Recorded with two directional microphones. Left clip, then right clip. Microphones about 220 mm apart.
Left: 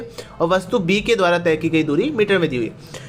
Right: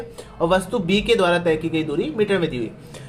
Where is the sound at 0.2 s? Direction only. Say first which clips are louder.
Left 1 dB; 15° left (ahead or behind).